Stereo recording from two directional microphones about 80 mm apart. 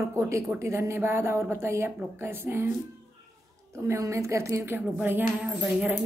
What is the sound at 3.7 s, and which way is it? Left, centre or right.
Speech, right.